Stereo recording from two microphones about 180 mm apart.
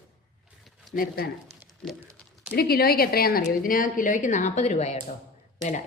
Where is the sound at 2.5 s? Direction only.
60° left (ahead or behind); by 4.9 s 40° left (ahead or behind).